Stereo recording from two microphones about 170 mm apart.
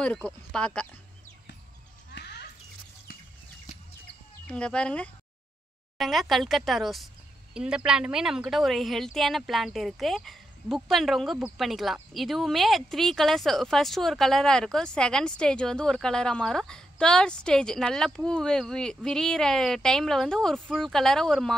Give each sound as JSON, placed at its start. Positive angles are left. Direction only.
{"t": 0.0, "sound": "speech", "side_deg": 5}
{"t": 2.1, "sound": "a sound", "side_deg": 80}
{"t": 4.5, "sound": "a woman's voice", "side_deg": 5}